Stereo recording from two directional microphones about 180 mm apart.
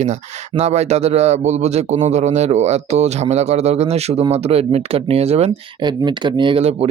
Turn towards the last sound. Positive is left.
turn(degrees=-30)  # may be behind; listen again after turning